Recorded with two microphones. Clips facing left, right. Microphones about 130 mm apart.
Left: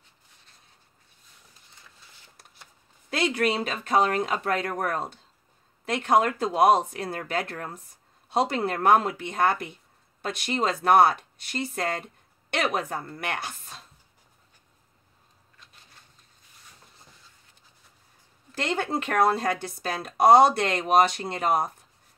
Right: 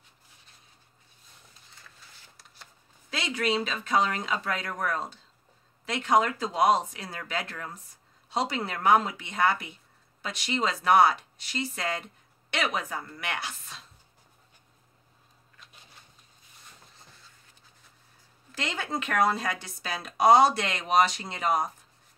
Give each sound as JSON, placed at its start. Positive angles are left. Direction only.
{"t": 3.1, "sound": "a woman's voice", "side_deg": 55}
{"t": 18.5, "sound": "speech", "side_deg": 55}